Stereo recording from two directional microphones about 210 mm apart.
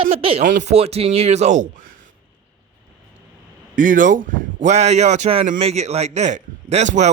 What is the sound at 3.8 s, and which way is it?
A man's voice, 40° right (ahead or behind).